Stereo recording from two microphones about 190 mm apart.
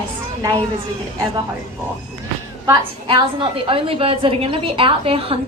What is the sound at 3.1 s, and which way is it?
A woman's voice, 25° right (ahead or behind).